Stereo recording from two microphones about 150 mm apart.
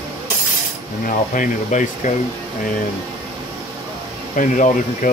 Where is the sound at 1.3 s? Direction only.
60° left (ahead or behind).